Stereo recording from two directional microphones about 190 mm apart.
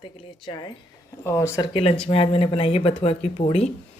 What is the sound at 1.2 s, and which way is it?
Speech, 15° left (ahead or behind).